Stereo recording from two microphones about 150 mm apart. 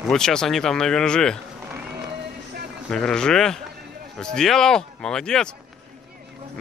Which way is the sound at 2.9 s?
5° left (ahead or behind).